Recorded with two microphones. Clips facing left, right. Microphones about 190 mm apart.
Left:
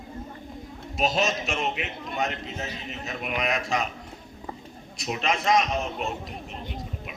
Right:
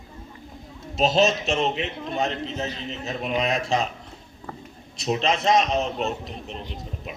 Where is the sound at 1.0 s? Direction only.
25° right (ahead or behind).